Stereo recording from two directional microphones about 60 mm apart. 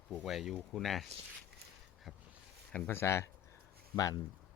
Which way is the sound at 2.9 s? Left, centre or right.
Left.